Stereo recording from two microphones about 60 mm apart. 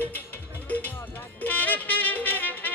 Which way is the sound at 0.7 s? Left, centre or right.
Left.